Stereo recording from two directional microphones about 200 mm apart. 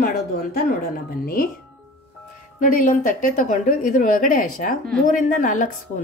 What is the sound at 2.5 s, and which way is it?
A woman's voice, 40° left (ahead or behind).